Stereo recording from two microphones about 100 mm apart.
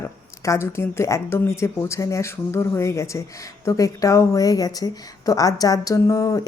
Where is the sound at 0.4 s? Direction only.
25° left (ahead or behind).